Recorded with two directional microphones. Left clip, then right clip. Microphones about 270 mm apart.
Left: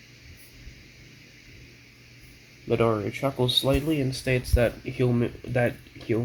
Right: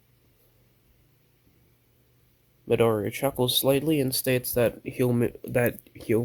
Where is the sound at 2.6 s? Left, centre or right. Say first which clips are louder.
Right 1 dB; right.